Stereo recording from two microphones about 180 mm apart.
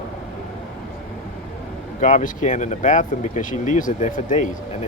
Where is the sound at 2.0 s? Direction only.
45° left (ahead or behind).